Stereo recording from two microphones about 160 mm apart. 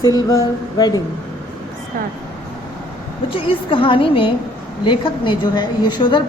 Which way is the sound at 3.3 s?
35° left (ahead or behind).